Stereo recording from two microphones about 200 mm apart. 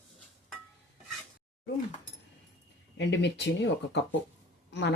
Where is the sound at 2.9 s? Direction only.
60° left (ahead or behind).